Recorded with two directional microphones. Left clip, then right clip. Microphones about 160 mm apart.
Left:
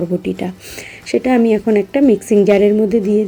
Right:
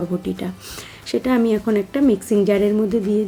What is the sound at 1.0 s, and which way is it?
A woman's voice, 15° left (ahead or behind).